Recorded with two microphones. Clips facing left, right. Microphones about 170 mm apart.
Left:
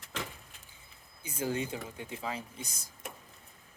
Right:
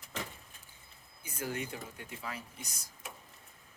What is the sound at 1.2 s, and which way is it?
Speech, 25° left (ahead or behind).